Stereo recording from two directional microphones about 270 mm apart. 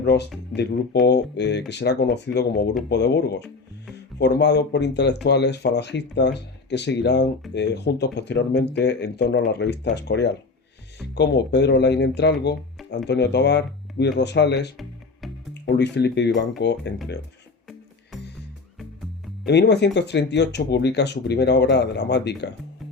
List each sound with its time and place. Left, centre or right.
0.0 s speech: left
19.5 s speech: left